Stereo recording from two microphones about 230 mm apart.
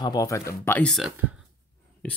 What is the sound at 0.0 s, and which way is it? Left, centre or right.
Speech, centre.